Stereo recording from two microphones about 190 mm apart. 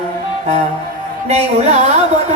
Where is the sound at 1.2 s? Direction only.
35° right (ahead or behind).